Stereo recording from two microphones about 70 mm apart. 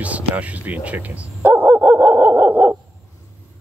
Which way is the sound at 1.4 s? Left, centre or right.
Right.